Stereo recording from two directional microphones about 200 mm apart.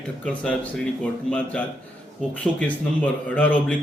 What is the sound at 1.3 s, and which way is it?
A man's voice, 10° left (ahead or behind).